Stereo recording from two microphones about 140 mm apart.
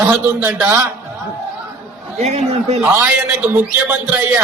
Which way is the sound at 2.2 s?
50° right (ahead or behind).